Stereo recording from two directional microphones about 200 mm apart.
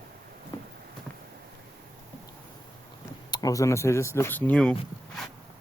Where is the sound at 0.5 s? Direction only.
20° left (ahead or behind).